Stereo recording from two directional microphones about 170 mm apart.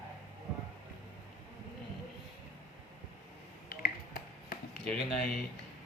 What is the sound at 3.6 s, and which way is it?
Finger snapping, 60° left (ahead or behind).